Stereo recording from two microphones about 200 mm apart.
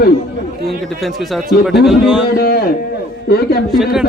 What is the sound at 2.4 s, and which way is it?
Speech, 50° left (ahead or behind).